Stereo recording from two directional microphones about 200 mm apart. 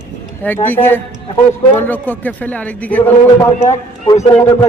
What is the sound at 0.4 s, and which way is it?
Speech, 10° left (ahead or behind).